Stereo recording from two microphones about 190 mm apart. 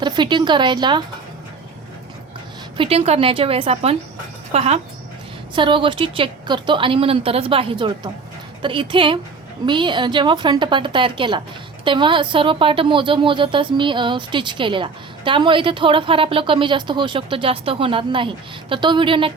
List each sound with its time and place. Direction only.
0.0 s a woman's voice: 25° right (ahead or behind)
2.7 s a woman's voice: 30° right (ahead or behind)